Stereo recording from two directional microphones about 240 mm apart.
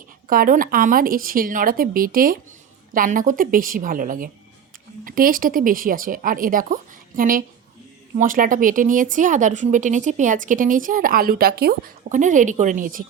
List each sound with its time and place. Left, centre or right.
0.3 s speech: right